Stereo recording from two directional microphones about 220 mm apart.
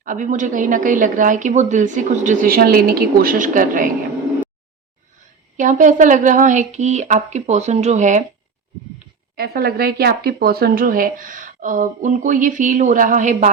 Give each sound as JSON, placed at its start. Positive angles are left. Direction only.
{"t": 0.0, "sound": "speech", "side_deg": -35}
{"t": 5.5, "sound": "speech", "side_deg": -35}
{"t": 9.3, "sound": "speech", "side_deg": -45}